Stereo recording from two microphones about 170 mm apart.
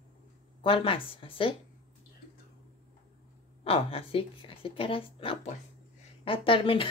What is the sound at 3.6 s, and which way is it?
A woman's voice, 35° left (ahead or behind).